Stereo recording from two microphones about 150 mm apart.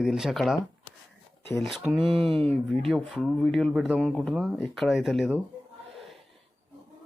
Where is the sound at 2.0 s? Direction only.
35° right (ahead or behind).